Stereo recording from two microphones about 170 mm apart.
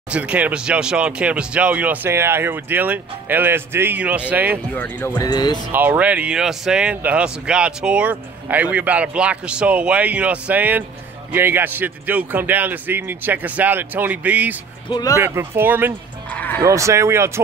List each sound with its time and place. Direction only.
0.1 s speech: 10° right (ahead or behind)
4.7 s speech: 10° left (ahead or behind)
5.1 s speech: 25° left (ahead or behind)
5.7 s speech: 10° right (ahead or behind)
14.9 s speech: 25° left (ahead or behind)
15.1 s speech: 15° right (ahead or behind)
16.3 s music: 10° left (ahead or behind)
16.6 s speech: 20° right (ahead or behind)